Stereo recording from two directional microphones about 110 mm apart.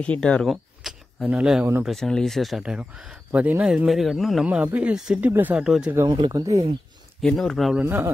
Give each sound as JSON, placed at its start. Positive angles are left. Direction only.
{"t": 0.0, "sound": "speech", "side_deg": 10}
{"t": 1.9, "sound": "a man's voice", "side_deg": 5}
{"t": 2.6, "sound": "a man's voice", "side_deg": -10}
{"t": 4.5, "sound": "speech", "side_deg": -10}
{"t": 5.6, "sound": "a man's voice", "side_deg": -5}
{"t": 6.0, "sound": "speech", "side_deg": -40}
{"t": 7.2, "sound": "a man's voice", "side_deg": 5}
{"t": 7.8, "sound": "speech", "side_deg": -25}